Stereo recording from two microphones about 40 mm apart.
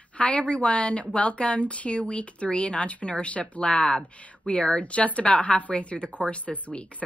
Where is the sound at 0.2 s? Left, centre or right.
Left.